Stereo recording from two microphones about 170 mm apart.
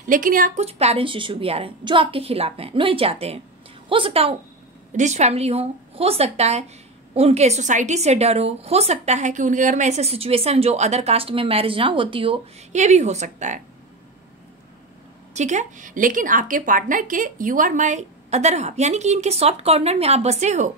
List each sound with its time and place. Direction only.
0.0 s a woman's voice: 55° right (ahead or behind)
0.7 s a woman's voice: 35° right (ahead or behind)
15.3 s a woman's voice: 45° right (ahead or behind)